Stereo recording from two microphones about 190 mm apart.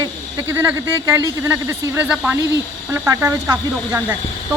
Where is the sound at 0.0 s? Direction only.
15° right (ahead or behind).